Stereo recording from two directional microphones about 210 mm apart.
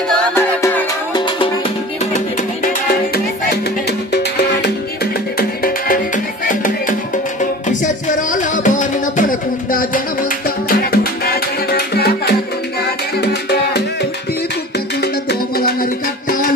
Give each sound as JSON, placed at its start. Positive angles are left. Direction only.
{"t": 0.3, "sound": "music", "side_deg": 10}
{"t": 5.4, "sound": "music", "side_deg": 45}
{"t": 7.8, "sound": "music", "side_deg": 40}